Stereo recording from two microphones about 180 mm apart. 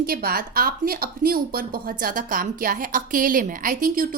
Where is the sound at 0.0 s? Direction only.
55° right (ahead or behind).